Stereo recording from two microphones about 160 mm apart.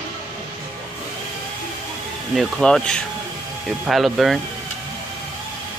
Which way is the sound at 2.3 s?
Centre (ahead or behind).